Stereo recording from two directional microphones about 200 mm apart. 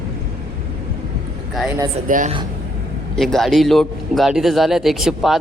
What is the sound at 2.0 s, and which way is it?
Speech, 40° right (ahead or behind).